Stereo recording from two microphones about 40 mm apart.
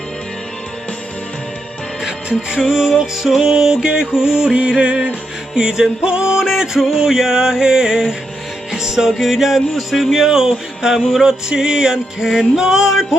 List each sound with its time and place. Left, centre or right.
2.0 s music: centre
6.4 s music: centre
10.2 s music: centre